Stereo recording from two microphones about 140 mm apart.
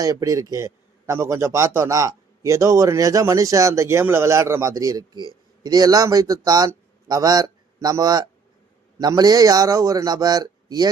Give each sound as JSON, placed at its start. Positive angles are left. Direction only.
{"t": 0.0, "sound": "a man's voice", "side_deg": -25}